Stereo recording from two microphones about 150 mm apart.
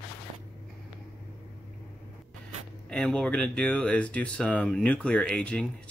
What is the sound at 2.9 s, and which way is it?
Speech, 5° left (ahead or behind).